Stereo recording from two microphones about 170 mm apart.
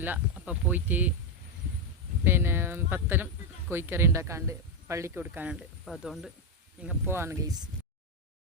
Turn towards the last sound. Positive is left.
turn(degrees=-20)  # may be behind; listen again after turning